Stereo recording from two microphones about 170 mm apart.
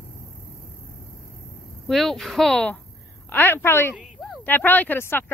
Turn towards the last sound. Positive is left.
turn(degrees=10)  # may be behind; listen again after turning